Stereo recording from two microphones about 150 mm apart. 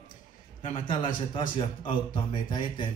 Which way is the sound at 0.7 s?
35° left (ahead or behind).